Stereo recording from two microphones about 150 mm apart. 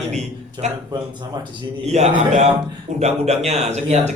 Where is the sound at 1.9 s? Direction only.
50° right (ahead or behind).